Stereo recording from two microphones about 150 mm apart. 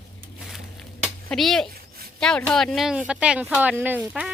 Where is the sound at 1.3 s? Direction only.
Centre (ahead or behind).